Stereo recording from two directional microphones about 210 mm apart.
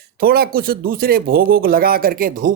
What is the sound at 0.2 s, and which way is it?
Speech, 45° right (ahead or behind).